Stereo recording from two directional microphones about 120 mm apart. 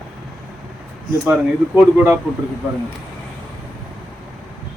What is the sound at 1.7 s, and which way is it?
Speech, 15° right (ahead or behind).